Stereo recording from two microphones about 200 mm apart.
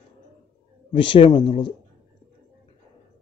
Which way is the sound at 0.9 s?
25° left (ahead or behind).